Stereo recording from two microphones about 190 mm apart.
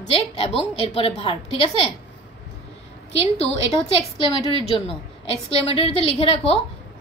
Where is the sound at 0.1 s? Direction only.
30° left (ahead or behind).